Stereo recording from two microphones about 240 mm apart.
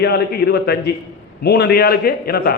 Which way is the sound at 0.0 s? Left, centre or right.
Left.